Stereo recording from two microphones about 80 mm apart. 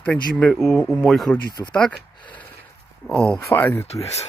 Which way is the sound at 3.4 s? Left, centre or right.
Left.